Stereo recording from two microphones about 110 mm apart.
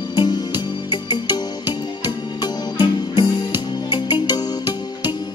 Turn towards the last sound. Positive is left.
turn(degrees=40)  # may be behind; listen again after turning